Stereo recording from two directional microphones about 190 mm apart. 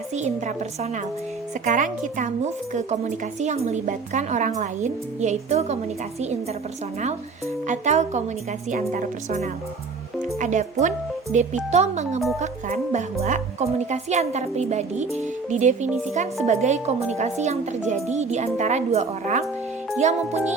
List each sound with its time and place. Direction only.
0.1 s speech: 35° right (ahead or behind)
7.7 s speech: 40° right (ahead or behind)